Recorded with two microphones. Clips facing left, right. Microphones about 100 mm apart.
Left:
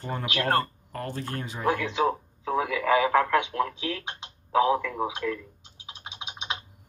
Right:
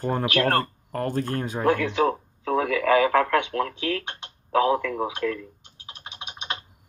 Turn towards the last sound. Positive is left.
turn(degrees=10)  # may be behind; listen again after turning